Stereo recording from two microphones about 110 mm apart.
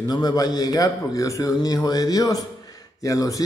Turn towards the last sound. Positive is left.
turn(degrees=30)  # may be behind; listen again after turning